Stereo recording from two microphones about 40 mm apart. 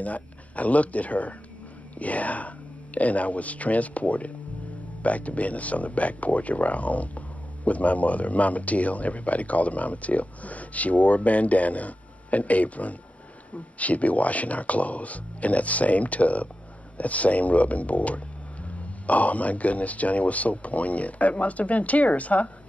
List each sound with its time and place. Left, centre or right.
0.0 s speech: left